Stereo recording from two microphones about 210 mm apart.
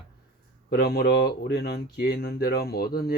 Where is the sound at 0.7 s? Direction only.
45° left (ahead or behind).